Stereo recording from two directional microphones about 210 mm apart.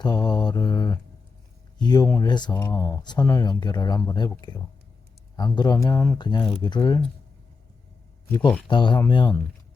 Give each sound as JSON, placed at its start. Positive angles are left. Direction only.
{"t": 0.0, "sound": "speech", "side_deg": 20}
{"t": 8.4, "sound": "speech", "side_deg": 5}
{"t": 8.7, "sound": "speech", "side_deg": 20}